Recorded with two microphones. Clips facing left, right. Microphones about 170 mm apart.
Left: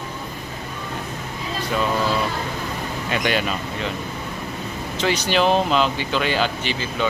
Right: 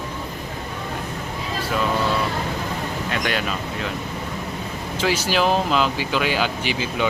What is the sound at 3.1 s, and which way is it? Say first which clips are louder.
Speech: left 4 dB; centre (ahead or behind).